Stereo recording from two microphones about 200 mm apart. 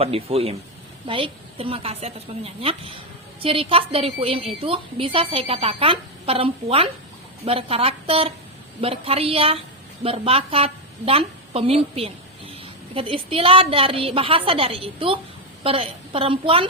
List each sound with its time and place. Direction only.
0.0 s a woman's voice: 30° right (ahead or behind)